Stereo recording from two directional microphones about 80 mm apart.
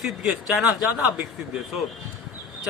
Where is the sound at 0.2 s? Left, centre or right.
Centre.